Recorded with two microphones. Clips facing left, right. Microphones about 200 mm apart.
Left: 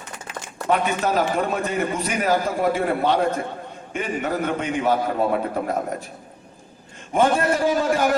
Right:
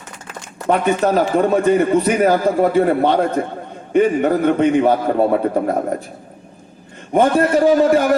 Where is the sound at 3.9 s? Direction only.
60° right (ahead or behind).